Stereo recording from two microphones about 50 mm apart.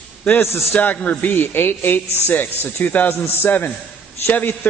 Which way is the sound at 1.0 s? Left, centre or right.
Left.